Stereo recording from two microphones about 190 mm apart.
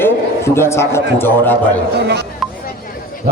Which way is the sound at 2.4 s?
Centre (ahead or behind).